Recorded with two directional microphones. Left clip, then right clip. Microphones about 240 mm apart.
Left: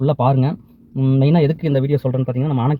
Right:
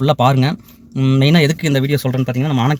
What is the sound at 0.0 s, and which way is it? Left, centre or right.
Speech, centre.